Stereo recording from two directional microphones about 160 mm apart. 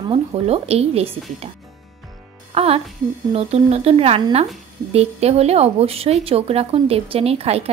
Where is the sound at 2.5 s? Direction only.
35° right (ahead or behind).